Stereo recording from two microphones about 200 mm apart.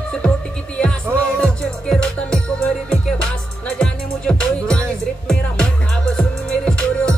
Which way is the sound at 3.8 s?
5° left (ahead or behind).